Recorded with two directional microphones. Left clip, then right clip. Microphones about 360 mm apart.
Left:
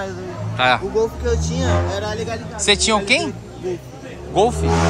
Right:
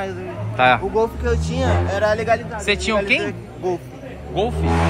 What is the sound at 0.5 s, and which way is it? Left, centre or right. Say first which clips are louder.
Speech: right 1 dB; centre.